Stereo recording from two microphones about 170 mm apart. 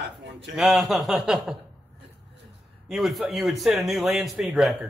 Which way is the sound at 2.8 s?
Centre (ahead or behind).